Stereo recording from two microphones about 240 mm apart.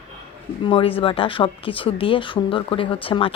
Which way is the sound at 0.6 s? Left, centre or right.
Left.